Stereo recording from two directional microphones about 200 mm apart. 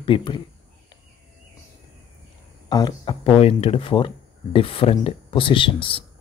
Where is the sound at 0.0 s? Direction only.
25° left (ahead or behind).